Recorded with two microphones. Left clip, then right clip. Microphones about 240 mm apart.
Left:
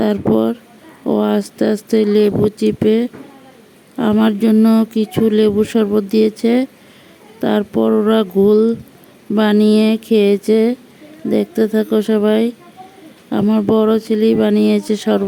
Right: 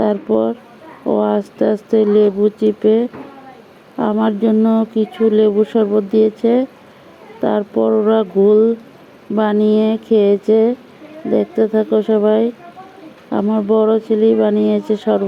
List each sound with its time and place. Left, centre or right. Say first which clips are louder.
0.0 s speech: even; left